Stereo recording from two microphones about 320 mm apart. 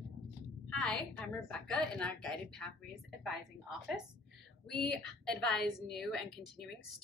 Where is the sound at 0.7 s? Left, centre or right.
Centre.